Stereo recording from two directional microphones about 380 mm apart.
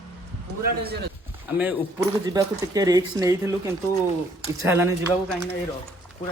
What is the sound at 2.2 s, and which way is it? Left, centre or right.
Speech, centre.